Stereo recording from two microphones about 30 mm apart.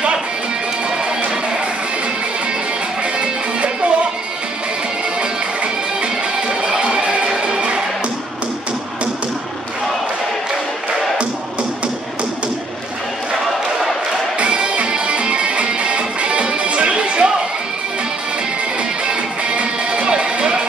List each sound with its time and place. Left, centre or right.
3.0 s music: right
7.2 s music: right
14.4 s music: right
19.0 s music: right